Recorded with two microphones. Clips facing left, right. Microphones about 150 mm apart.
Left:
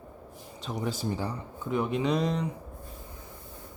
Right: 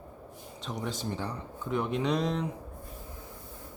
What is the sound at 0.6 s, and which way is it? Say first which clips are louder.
Speech: left 3 dB; 5° left (ahead or behind).